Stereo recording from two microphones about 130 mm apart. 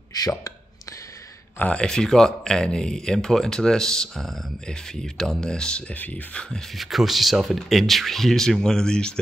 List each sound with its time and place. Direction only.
1.6 s speech: 10° left (ahead or behind)